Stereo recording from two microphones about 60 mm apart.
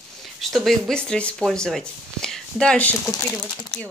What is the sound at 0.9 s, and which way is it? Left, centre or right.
Speech, centre.